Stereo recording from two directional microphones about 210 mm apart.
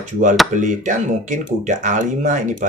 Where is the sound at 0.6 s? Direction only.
35° right (ahead or behind).